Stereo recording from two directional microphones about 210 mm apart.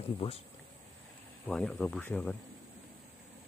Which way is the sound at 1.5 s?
5° left (ahead or behind).